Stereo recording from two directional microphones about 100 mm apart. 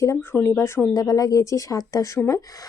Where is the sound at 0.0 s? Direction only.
30° left (ahead or behind).